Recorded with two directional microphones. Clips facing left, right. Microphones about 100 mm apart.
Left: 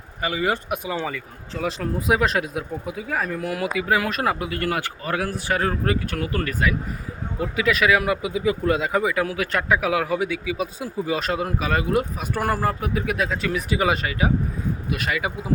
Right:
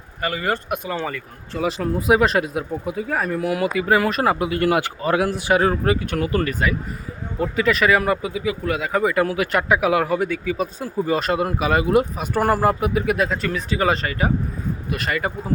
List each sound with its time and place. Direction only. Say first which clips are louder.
0.2 s speech: even; 10° left (ahead or behind); by 6.0 s 15° right (ahead or behind)
6.1 s speech: right 4 dB; 5° right (ahead or behind)
8.3 s speech: left 2 dB; 30° left (ahead or behind)
8.9 s speech: right 3 dB; 5° left (ahead or behind)
13.5 s speech: right 1 dB; 10° left (ahead or behind)